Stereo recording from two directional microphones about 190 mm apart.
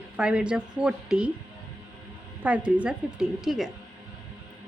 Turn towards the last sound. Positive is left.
turn(degrees=0)  # may be behind; listen again after turning